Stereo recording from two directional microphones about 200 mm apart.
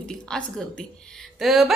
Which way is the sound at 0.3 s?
5° left (ahead or behind).